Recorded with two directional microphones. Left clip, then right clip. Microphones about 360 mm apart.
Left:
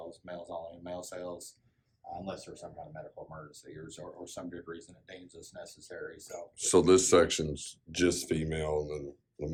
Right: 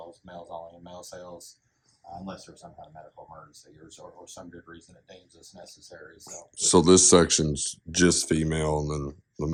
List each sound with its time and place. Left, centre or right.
0.5 s speech: centre
4.4 s speech: centre
6.3 s speech: centre